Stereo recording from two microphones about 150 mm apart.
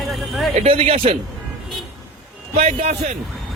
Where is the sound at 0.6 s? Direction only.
40° right (ahead or behind).